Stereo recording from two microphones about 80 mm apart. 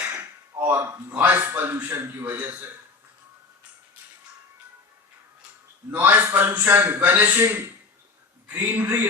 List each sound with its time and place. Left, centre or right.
0.6 s a man's voice: right
5.9 s a man's voice: right